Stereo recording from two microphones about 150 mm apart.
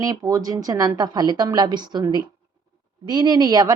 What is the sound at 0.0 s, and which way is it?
Speech, 25° right (ahead or behind).